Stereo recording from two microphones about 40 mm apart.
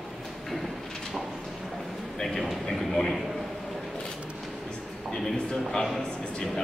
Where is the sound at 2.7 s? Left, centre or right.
Centre.